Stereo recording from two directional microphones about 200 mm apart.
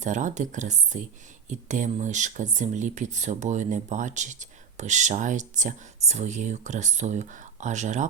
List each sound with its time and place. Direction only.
0.0 s speech: 40° right (ahead or behind)